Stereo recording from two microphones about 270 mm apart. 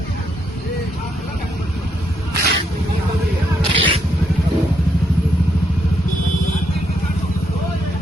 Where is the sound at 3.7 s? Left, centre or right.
Centre.